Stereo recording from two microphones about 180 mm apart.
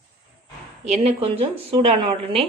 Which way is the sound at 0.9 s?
35° right (ahead or behind).